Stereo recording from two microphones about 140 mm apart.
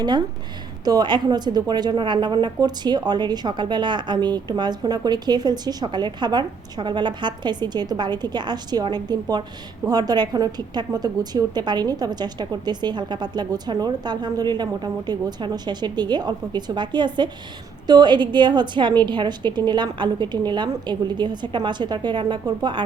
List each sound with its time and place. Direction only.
0.9 s a woman's voice: 30° right (ahead or behind)